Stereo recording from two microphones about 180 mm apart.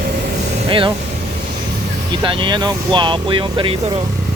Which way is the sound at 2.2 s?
25° right (ahead or behind).